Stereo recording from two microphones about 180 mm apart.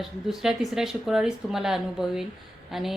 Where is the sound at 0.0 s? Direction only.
Centre (ahead or behind).